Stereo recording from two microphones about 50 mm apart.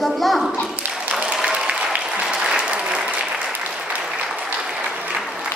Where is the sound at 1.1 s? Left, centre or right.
Right.